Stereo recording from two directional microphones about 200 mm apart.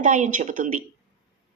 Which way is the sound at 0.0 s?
40° right (ahead or behind).